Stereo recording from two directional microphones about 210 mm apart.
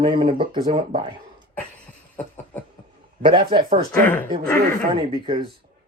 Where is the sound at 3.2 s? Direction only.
25° right (ahead or behind).